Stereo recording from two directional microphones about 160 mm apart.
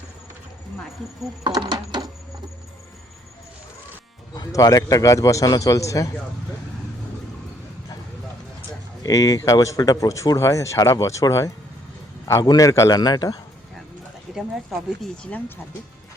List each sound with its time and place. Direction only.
1.5 s speech: 25° right (ahead or behind)
4.4 s speech: 20° left (ahead or behind)
9.0 s speech: 25° left (ahead or behind)
14.3 s speech: centre (ahead or behind)